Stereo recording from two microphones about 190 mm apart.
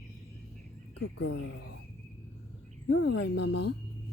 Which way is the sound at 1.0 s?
65° left (ahead or behind).